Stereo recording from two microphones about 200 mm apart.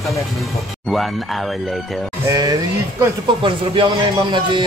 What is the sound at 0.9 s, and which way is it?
Speech, centre (ahead or behind).